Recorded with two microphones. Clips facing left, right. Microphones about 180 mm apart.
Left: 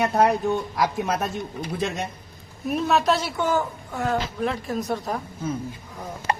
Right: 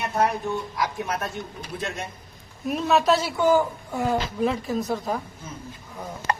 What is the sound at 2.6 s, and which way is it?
A woman's voice, centre (ahead or behind).